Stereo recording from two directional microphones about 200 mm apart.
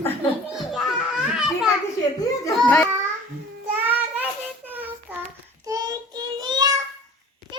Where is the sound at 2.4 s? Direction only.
15° left (ahead or behind).